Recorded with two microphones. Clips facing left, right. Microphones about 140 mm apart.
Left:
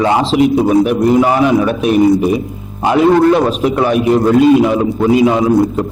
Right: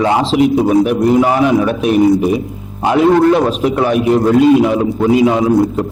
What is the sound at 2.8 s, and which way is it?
A man's voice, 20° left (ahead or behind).